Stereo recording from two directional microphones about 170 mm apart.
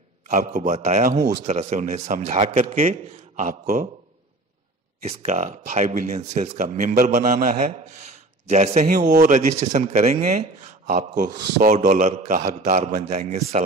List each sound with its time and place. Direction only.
0.3 s speech: 45° right (ahead or behind)
2.5 s speech: 50° right (ahead or behind)
5.0 s speech: 40° right (ahead or behind)